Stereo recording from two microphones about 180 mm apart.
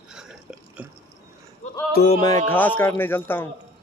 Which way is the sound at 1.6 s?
40° left (ahead or behind).